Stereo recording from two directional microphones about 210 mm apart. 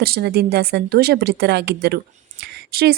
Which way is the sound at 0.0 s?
50° right (ahead or behind).